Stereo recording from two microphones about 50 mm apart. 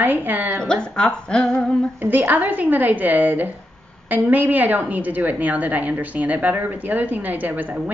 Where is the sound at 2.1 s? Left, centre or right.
Right.